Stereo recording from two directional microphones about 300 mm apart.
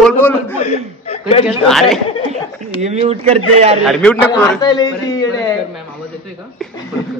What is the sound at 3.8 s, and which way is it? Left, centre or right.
A man's voice, centre.